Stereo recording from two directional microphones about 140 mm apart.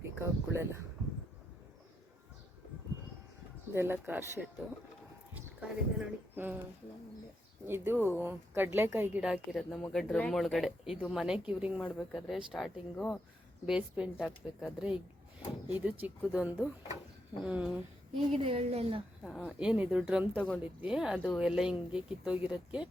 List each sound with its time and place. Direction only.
0.2 s a woman's voice: 20° right (ahead or behind)
3.8 s a woman's voice: 15° right (ahead or behind)
7.7 s a woman's voice: 15° right (ahead or behind)
9.2 s a woman's voice: centre (ahead or behind)
18.3 s a woman's voice: 40° right (ahead or behind)
19.5 s a woman's voice: 5° right (ahead or behind)